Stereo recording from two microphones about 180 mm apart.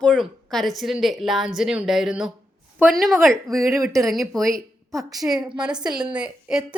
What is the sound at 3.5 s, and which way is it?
Speech, 15° right (ahead or behind).